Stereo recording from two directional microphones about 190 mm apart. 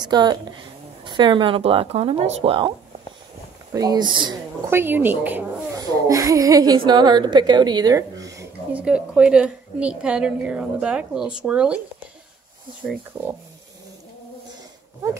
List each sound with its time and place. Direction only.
0.0 s a woman's voice: 20° right (ahead or behind)
3.7 s a woman's voice: 20° right (ahead or behind)
4.6 s a woman's voice: 10° right (ahead or behind)
8.8 s a woman's voice: 5° right (ahead or behind)